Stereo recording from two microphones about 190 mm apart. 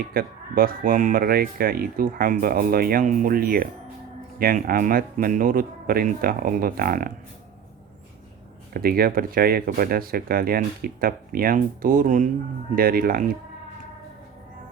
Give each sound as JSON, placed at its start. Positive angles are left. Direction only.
{"t": 0.1, "sound": "speech", "side_deg": -50}
{"t": 8.7, "sound": "speech", "side_deg": -50}